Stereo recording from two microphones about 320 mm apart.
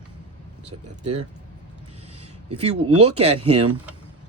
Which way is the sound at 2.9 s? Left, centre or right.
Right.